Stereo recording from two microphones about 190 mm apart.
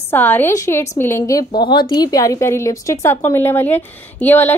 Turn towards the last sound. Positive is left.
turn(degrees=10)  # may be behind; listen again after turning